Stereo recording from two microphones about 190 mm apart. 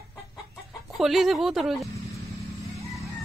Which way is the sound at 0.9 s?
Centre (ahead or behind).